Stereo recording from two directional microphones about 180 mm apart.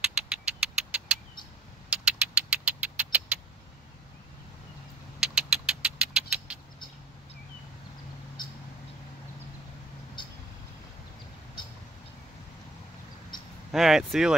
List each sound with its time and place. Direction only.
0.0 s vehicle: 5° right (ahead or behind)
5.2 s vehicle: 5° right (ahead or behind)
10.2 s vehicle: 25° left (ahead or behind)
13.7 s speech: centre (ahead or behind)